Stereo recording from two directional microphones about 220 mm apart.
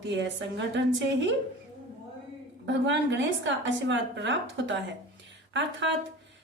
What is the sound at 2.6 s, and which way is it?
A woman's voice, 55° right (ahead or behind).